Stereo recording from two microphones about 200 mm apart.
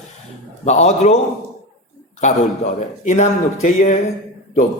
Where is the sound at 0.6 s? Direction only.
35° left (ahead or behind).